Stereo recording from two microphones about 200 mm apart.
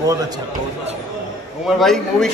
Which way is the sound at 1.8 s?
Centre (ahead or behind).